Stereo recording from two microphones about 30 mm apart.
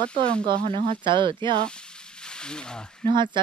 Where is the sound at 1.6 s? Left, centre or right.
Left.